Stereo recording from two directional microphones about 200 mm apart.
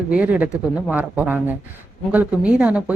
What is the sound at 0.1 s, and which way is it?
A woman's voice, 5° right (ahead or behind).